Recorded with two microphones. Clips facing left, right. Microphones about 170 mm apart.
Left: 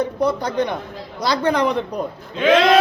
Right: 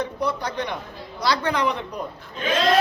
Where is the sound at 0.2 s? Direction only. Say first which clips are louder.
Left 6 dB; 45° left (ahead or behind).